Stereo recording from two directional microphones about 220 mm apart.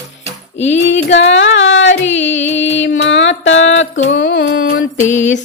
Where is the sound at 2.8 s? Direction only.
55° left (ahead or behind).